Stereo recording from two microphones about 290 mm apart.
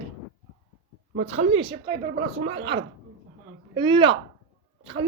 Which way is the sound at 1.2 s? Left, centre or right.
Right.